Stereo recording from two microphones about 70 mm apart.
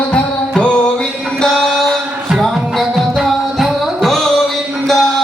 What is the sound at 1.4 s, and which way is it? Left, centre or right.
Chant, centre.